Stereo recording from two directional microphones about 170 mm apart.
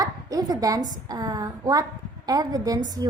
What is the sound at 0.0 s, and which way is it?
A woman's voice, 20° right (ahead or behind).